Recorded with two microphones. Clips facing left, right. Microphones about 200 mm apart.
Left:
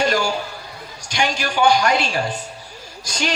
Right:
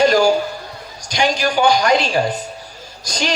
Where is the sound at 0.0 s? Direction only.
40° right (ahead or behind).